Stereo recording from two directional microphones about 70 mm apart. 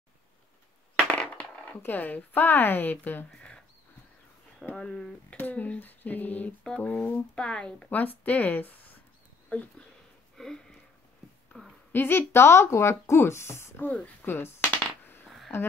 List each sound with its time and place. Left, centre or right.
0.9 s coin: centre
1.8 s speech: left
4.7 s speech: centre
7.9 s speech: left
10.3 s a sound: centre
11.9 s speech: left
13.8 s speech: left
14.2 s a sound: left
15.2 s a sound: centre